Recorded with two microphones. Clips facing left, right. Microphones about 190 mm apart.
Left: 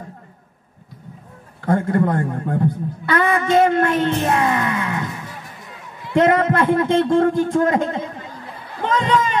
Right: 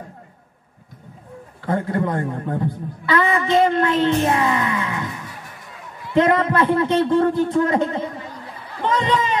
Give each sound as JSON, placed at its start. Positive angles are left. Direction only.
{"t": 1.6, "sound": "speech", "side_deg": 50}
{"t": 6.1, "sound": "speech", "side_deg": 45}
{"t": 8.8, "sound": "a sound", "side_deg": 50}